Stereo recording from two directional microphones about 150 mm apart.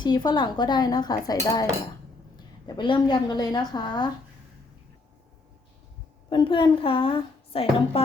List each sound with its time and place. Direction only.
0.0 s a woman's voice: 30° left (ahead or behind)
6.3 s a woman's voice: 35° left (ahead or behind)